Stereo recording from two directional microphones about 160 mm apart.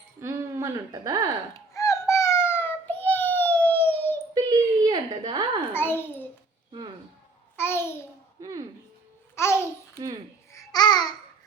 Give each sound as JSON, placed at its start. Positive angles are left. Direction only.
{"t": 0.2, "sound": "speech", "side_deg": -15}
{"t": 1.7, "sound": "baby cry", "side_deg": 20}
{"t": 4.4, "sound": "a sound", "side_deg": -25}
{"t": 5.7, "sound": "babbling", "side_deg": 15}
{"t": 7.5, "sound": "babbling", "side_deg": 15}
{"t": 8.4, "sound": "a sound", "side_deg": -20}
{"t": 9.3, "sound": "babbling", "side_deg": 15}